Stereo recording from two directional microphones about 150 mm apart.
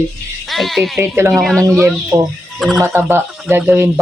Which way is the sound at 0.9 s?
15° right (ahead or behind).